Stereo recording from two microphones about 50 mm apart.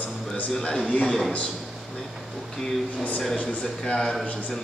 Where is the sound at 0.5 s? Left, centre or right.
Centre.